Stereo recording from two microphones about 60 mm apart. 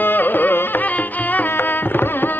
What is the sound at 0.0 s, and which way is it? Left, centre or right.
Music, left.